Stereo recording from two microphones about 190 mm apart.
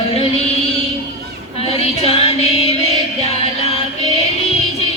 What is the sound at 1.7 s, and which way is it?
Music, 30° left (ahead or behind).